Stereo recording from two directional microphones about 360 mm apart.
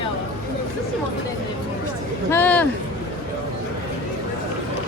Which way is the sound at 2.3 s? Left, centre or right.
Centre.